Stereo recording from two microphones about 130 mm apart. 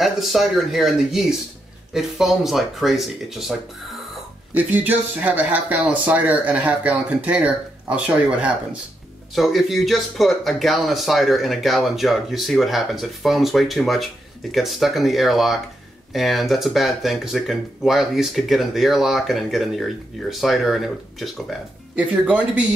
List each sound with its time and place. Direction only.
0.0 s speech: centre (ahead or behind)
4.6 s speech: 10° right (ahead or behind)